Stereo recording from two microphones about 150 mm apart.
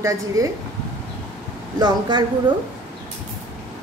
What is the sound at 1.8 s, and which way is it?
Speech, 30° right (ahead or behind).